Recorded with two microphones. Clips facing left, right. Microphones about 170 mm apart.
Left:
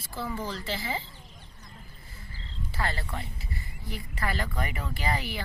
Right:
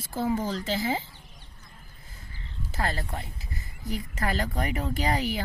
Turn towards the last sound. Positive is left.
turn(degrees=-45)  # may be behind; listen again after turning